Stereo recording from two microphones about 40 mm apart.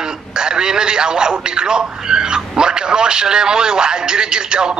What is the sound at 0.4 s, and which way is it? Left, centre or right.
A man's voice, centre.